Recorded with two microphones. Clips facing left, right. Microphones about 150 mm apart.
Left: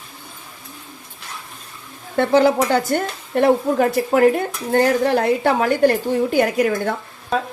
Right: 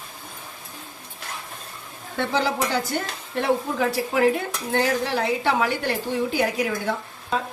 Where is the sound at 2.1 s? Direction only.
50° left (ahead or behind).